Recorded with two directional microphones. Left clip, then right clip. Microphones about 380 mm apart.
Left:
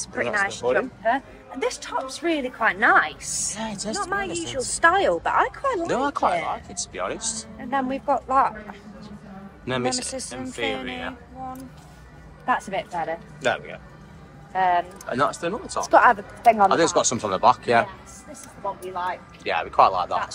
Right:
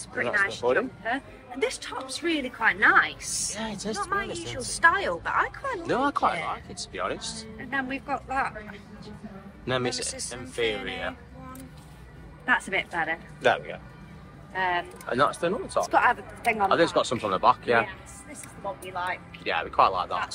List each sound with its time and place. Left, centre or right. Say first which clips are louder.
0.0 s a woman's voice: left 2 dB; left
3.5 s a woman's voice: left 3 dB; centre
4.0 s a woman's voice: left 3 dB; centre
5.9 s speech: right 1 dB; centre
7.5 s speech: left 5 dB; centre
9.7 s a woman's voice: left 2 dB; centre
10.0 s a woman's voice: left 3 dB; left
10.8 s a woman's voice: left 1 dB; centre
12.4 s a woman's voice: left 1 dB; centre
14.5 s speech: left 6 dB; left
15.0 s a woman's voice: right 4 dB; centre
15.9 s a woman's voice: left 8 dB; left
16.6 s speech: left 4 dB; centre
18.9 s speech: left 3 dB; centre